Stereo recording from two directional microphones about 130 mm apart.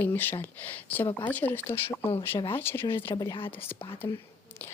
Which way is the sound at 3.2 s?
30° left (ahead or behind).